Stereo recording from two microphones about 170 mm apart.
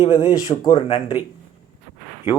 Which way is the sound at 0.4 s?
20° left (ahead or behind).